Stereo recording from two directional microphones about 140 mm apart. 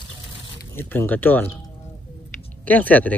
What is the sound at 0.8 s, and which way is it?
Speech, 15° left (ahead or behind).